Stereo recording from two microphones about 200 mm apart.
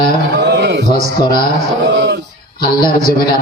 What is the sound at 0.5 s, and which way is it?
Speech, 60° right (ahead or behind).